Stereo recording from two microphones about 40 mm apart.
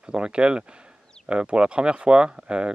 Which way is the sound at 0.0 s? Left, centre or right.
Right.